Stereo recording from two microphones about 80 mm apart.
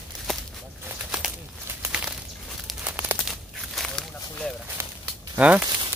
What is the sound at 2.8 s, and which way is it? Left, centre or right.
Crumpling, right.